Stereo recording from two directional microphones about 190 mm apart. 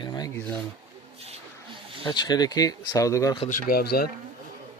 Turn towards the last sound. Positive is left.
turn(degrees=55)  # may be behind; listen again after turning